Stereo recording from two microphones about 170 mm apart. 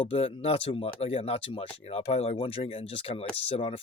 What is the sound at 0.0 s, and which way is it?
Speech, 35° left (ahead or behind).